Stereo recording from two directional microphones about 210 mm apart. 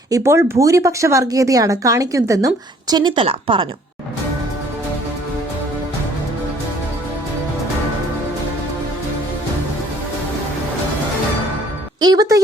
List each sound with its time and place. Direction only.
0.1 s speech: 10° right (ahead or behind)
11.9 s speech: 20° right (ahead or behind)